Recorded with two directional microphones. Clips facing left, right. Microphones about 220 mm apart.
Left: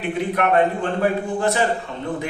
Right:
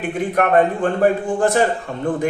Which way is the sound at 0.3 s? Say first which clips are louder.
Right 3 dB; 50° right (ahead or behind).